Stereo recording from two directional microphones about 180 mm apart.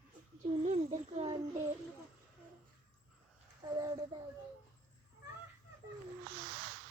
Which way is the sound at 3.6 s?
25° right (ahead or behind).